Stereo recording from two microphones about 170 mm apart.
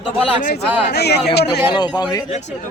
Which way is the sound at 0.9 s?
75° left (ahead or behind).